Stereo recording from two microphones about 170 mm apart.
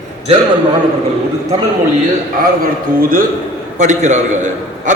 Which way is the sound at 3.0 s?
55° right (ahead or behind).